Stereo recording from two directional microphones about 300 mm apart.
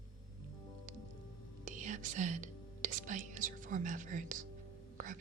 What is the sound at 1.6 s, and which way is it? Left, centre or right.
Speech, right.